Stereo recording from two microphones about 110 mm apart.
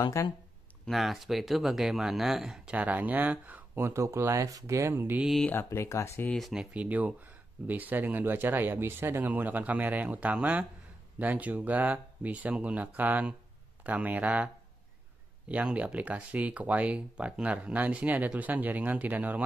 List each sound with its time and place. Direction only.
0.0 s speech: 30° left (ahead or behind)
0.8 s speech: centre (ahead or behind); by 5.2 s 20° right (ahead or behind)
5.4 s speech: 20° left (ahead or behind)
6.3 s speech: centre (ahead or behind)